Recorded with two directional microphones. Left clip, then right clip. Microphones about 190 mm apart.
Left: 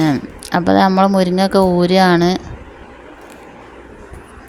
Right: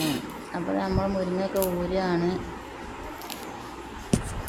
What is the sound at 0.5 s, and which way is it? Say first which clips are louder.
Speech: left 16 dB; 60° left (ahead or behind).